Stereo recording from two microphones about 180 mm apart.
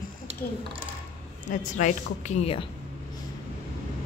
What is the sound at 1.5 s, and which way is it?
A woman's voice, 45° left (ahead or behind).